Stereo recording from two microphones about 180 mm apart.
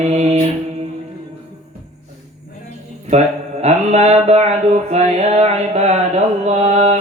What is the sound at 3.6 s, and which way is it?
Mantra, 40° right (ahead or behind).